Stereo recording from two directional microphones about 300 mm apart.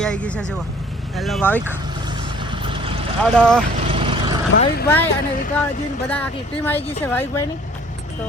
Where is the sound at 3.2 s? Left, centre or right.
Centre.